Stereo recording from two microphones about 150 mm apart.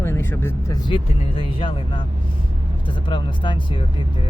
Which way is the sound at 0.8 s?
35° left (ahead or behind).